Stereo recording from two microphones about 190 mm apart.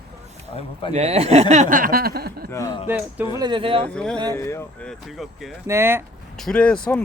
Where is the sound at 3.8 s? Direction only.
5° left (ahead or behind).